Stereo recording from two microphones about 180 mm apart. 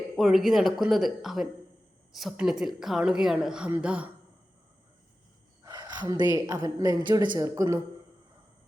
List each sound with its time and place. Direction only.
0.2 s a woman's voice: centre (ahead or behind)
5.6 s a sound: 20° right (ahead or behind)
6.3 s a woman's voice: 20° right (ahead or behind)